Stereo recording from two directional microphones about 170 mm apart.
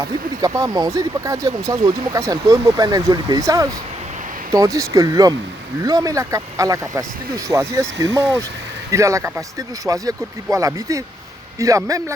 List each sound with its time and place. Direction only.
0.0 s speech: 20° right (ahead or behind)